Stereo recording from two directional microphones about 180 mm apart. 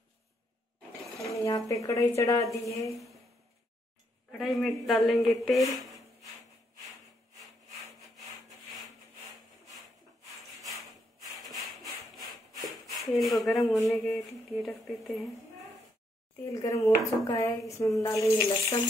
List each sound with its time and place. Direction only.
1.3 s speech: 15° left (ahead or behind)
2.9 s speech: centre (ahead or behind)
4.3 s a woman's voice: centre (ahead or behind)
11.3 s rub: centre (ahead or behind)
13.8 s a woman's voice: centre (ahead or behind)
16.5 s speech: 20° left (ahead or behind)